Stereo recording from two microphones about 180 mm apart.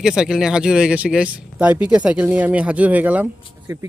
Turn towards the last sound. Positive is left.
turn(degrees=-15)  # may be behind; listen again after turning